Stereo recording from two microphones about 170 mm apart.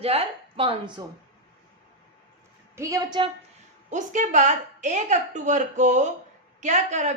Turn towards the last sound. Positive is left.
turn(degrees=-45)  # may be behind; listen again after turning